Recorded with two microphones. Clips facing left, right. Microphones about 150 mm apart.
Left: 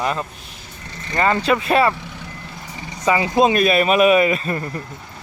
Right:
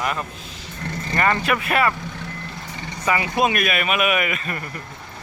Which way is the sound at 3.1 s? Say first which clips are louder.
Left 5 dB; 25° left (ahead or behind).